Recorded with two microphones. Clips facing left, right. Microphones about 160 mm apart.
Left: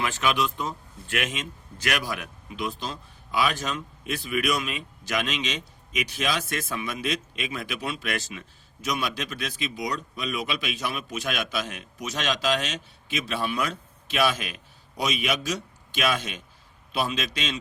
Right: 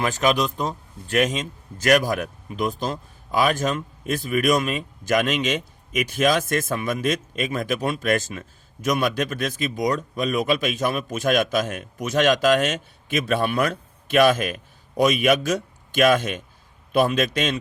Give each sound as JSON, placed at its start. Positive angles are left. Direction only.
{"t": 0.0, "sound": "a man's voice", "side_deg": -40}